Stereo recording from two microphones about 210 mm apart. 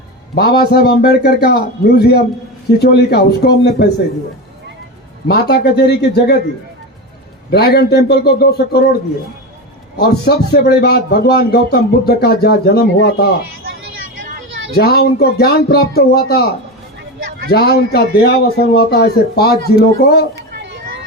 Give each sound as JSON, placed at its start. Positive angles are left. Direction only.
{"t": 0.3, "sound": "a man's voice", "side_deg": 50}
{"t": 5.3, "sound": "a man's voice", "side_deg": 50}
{"t": 7.5, "sound": "a man's voice", "side_deg": 50}
{"t": 10.0, "sound": "a man's voice", "side_deg": 50}
{"t": 14.8, "sound": "a man's voice", "side_deg": 50}
{"t": 17.5, "sound": "a man's voice", "side_deg": 50}
{"t": 20.6, "sound": "a sound", "side_deg": -60}